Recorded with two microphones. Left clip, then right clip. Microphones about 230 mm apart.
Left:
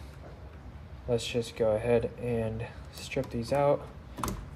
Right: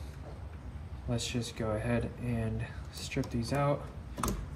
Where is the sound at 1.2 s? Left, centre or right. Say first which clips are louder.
Left 6 dB; left.